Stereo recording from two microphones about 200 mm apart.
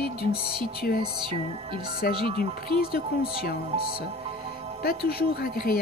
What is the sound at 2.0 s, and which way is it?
Speech, 50° left (ahead or behind).